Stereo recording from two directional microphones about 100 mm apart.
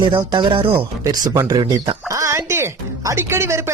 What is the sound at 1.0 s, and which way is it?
A woman's voice, 35° right (ahead or behind).